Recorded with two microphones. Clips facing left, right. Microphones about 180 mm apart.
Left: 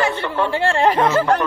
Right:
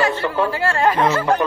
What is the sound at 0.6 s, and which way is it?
Speech, 25° left (ahead or behind).